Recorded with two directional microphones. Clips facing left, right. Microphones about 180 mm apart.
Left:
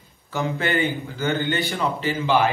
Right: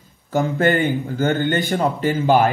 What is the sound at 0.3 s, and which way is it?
Speech, 50° right (ahead or behind).